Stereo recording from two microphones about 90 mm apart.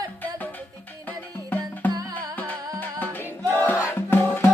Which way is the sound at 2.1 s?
20° left (ahead or behind).